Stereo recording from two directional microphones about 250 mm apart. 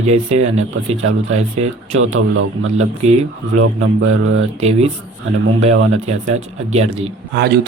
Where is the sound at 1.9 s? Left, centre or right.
Right.